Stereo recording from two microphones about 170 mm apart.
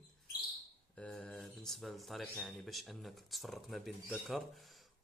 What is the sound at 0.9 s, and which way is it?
Speech, 5° left (ahead or behind).